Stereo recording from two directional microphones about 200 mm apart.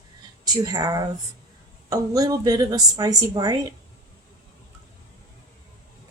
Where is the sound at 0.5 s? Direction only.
20° right (ahead or behind).